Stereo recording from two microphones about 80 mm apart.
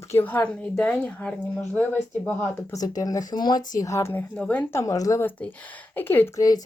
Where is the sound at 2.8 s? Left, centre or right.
Left.